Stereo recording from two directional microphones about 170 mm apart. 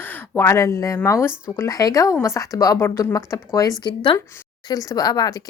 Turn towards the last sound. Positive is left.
turn(degrees=25)  # may be behind; listen again after turning